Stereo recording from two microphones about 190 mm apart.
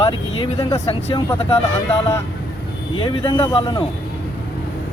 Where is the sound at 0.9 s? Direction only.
30° left (ahead or behind).